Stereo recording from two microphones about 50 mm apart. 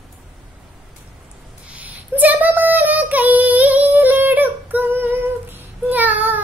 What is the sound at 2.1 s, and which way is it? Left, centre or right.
Female singing, right.